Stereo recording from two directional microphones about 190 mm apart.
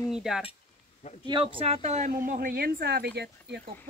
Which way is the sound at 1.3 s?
25° right (ahead or behind).